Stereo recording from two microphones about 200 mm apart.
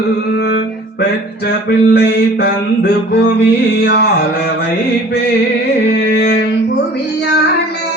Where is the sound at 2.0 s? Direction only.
55° left (ahead or behind).